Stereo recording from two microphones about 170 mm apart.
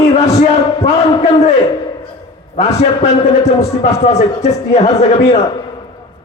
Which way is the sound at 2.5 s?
40° left (ahead or behind).